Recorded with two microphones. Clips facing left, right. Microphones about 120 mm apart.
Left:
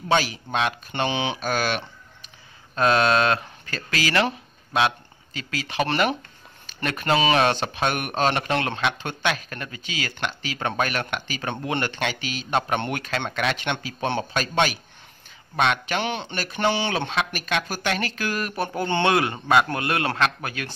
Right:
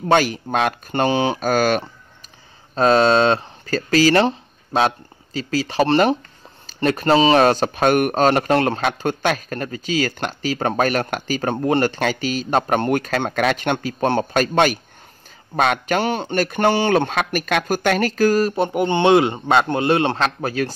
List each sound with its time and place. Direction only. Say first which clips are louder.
0.1 s speech: right 5 dB; 50° right (ahead or behind)
2.7 s speech: right 5 dB; 35° right (ahead or behind)
18.5 s a man's voice: right 6 dB; 20° right (ahead or behind)